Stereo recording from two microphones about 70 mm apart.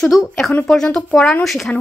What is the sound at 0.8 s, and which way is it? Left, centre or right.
Speech, centre.